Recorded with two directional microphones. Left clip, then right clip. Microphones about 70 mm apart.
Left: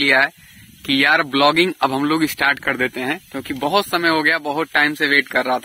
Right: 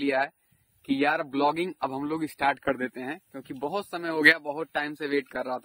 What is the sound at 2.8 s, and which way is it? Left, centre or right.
Speech, right.